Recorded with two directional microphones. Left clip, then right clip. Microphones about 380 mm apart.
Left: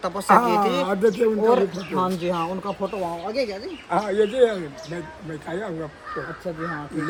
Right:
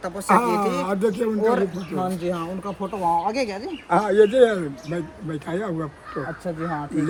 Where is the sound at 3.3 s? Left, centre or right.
Right.